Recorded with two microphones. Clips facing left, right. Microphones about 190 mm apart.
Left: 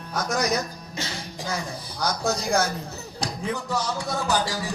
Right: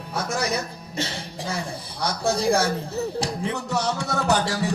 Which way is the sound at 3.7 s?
65° right (ahead or behind).